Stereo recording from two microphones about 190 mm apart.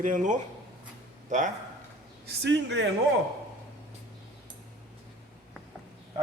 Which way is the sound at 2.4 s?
65° right (ahead or behind).